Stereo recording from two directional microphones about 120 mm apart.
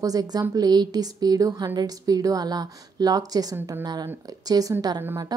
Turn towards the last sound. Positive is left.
turn(degrees=-35)  # may be behind; listen again after turning